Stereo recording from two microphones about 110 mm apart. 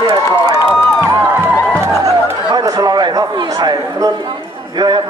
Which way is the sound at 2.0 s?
30° right (ahead or behind).